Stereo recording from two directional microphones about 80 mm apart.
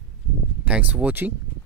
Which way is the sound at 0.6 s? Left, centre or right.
Centre.